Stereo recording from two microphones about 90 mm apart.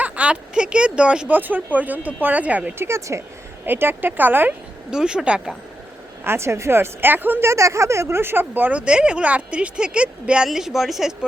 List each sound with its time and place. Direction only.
0.0 s speech: 15° right (ahead or behind)
4.9 s speech: 10° right (ahead or behind)
6.2 s speech: 30° right (ahead or behind); by 11.3 s 5° right (ahead or behind)